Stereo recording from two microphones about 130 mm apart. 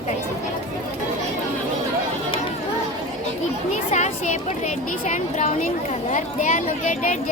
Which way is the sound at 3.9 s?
65° left (ahead or behind).